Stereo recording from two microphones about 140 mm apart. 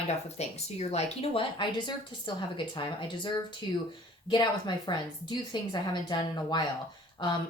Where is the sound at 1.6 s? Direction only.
35° left (ahead or behind).